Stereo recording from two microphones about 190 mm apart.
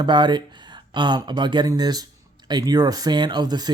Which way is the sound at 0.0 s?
25° right (ahead or behind).